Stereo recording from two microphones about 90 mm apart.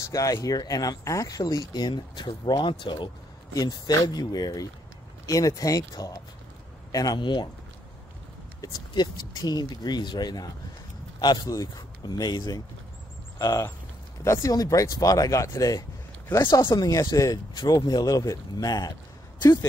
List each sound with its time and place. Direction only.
0.0 s speech: 40° left (ahead or behind); by 3.1 s 65° left (ahead or behind)
3.5 s speech: 50° left (ahead or behind)
7.2 s speech: 60° left (ahead or behind)
8.5 s speech: 50° left (ahead or behind)
16.6 s speech: 50° left (ahead or behind)